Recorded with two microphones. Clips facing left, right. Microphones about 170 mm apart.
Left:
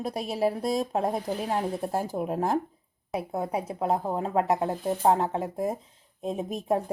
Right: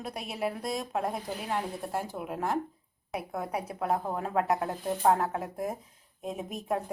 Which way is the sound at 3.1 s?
25° left (ahead or behind).